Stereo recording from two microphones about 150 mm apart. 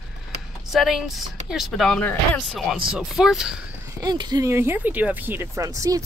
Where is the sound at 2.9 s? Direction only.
5° right (ahead or behind).